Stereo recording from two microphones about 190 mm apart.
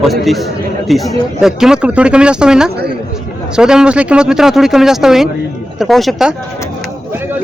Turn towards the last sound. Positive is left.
turn(degrees=0)  # may be behind; listen again after turning